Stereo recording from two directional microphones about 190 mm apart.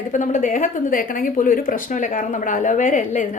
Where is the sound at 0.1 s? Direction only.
40° left (ahead or behind).